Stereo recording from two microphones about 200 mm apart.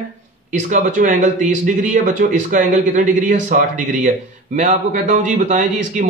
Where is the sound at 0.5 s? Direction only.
40° right (ahead or behind).